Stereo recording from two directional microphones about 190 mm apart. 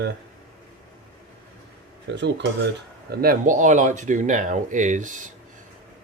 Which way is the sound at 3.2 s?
45° right (ahead or behind).